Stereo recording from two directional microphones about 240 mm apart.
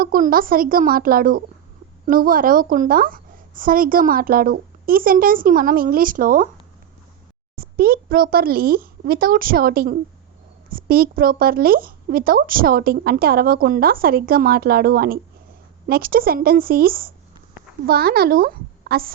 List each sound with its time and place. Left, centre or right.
0.0 s speech: right
7.5 s a woman's voice: right